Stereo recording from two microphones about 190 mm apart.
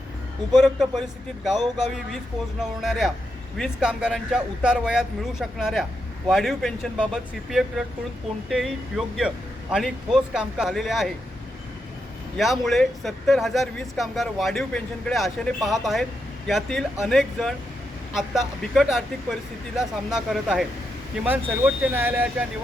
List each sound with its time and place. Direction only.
0.5 s speech: centre (ahead or behind)
12.4 s speech: centre (ahead or behind)